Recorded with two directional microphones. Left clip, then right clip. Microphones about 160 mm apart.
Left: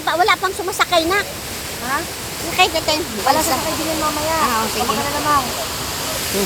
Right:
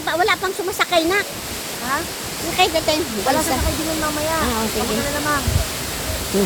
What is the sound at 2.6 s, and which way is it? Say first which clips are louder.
Speech: left 1 dB; 30° right (ahead or behind).